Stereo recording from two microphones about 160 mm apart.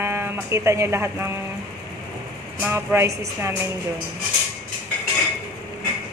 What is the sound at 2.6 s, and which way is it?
Speech, 15° right (ahead or behind).